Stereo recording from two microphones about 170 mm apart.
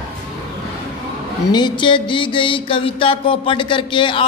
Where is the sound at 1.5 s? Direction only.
25° left (ahead or behind).